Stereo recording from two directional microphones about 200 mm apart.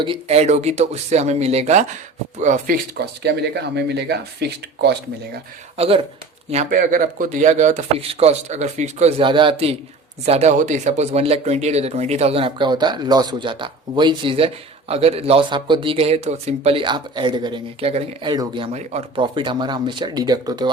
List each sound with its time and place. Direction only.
0.0 s speech: 30° right (ahead or behind); by 5.4 s 55° right (ahead or behind)
5.7 s speech: 30° right (ahead or behind)